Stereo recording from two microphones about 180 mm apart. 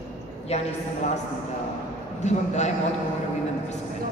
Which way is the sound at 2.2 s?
40° left (ahead or behind).